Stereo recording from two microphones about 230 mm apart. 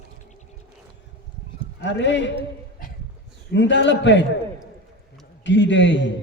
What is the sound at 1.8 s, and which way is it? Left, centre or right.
Clip-clop, left.